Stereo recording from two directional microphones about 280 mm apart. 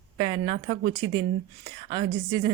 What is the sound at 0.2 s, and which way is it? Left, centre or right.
A woman's voice, centre.